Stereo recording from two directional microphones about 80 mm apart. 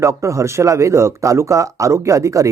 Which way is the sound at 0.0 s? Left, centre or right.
Right.